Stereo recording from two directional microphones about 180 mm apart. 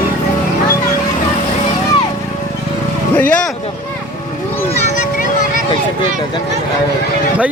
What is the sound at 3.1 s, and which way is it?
Speech, 5° left (ahead or behind).